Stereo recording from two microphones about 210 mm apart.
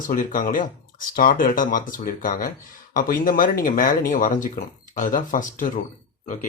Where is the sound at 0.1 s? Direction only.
40° left (ahead or behind).